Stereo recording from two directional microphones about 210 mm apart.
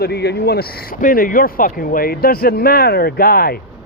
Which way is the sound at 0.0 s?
50° left (ahead or behind).